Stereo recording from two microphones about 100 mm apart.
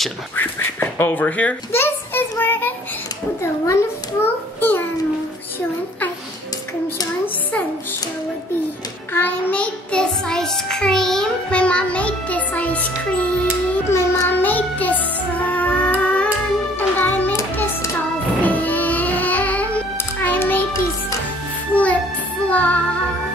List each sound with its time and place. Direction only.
0.4 s a sound: 20° left (ahead or behind)
9.1 s child singing: 15° left (ahead or behind)
13.8 s music: 25° left (ahead or behind)
18.4 s music: 15° left (ahead or behind)
22.5 s music: 15° left (ahead or behind)